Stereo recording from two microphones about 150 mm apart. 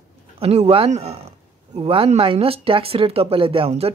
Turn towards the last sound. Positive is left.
turn(degrees=-35)  # may be behind; listen again after turning